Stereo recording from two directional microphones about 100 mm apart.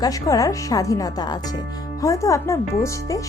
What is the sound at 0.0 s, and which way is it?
Speech, 35° left (ahead or behind).